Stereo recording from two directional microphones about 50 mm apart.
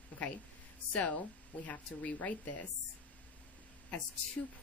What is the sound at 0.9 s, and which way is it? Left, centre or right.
A woman's voice, left.